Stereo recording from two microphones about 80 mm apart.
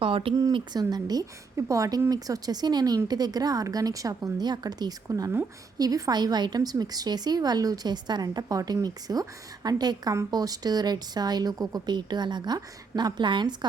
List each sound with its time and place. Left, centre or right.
0.0 s speech: right
0.5 s a woman's voice: right
1.5 s speech: right
5.0 s a woman's voice: right
11.9 s a woman's voice: right